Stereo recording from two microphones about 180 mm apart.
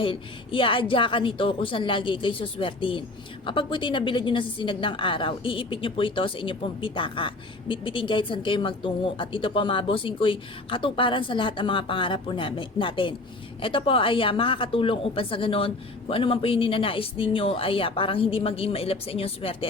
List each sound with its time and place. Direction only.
0.0 s a woman's voice: 30° left (ahead or behind)